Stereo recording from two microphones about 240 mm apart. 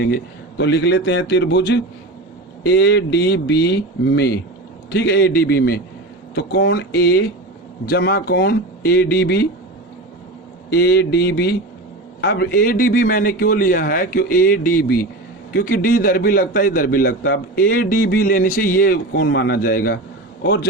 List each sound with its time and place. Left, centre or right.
0.6 s a man's voice: left
10.7 s a man's voice: left